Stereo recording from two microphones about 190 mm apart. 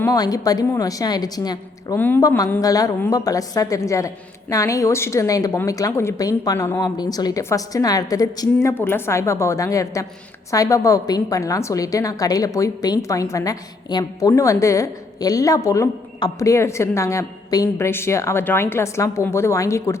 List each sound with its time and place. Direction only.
0.0 s a woman's voice: 20° left (ahead or behind)